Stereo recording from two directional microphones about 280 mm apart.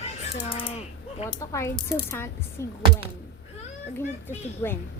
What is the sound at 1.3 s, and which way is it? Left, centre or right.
A woman's voice, centre.